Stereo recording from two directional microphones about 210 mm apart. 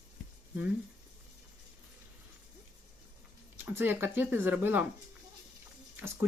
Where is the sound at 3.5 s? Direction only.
10° right (ahead or behind).